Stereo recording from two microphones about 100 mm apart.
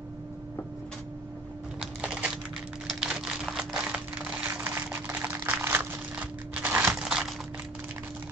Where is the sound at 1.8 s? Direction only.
10° right (ahead or behind).